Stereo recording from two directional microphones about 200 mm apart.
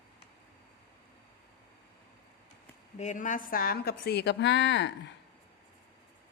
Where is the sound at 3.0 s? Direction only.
40° left (ahead or behind); by 4.9 s 60° left (ahead or behind).